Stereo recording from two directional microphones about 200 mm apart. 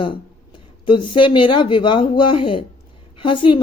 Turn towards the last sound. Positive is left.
turn(degrees=25)  # may be behind; listen again after turning